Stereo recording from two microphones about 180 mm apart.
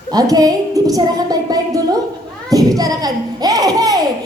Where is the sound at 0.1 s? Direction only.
20° right (ahead or behind).